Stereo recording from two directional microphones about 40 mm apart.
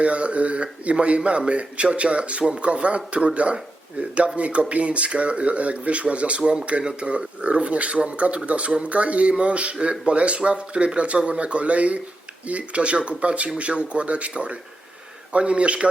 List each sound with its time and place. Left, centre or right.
0.0 s speech: right